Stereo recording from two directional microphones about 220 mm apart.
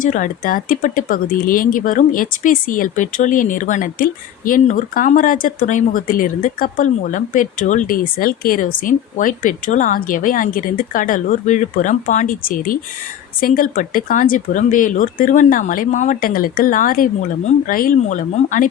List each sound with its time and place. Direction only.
0.0 s speech: 35° left (ahead or behind)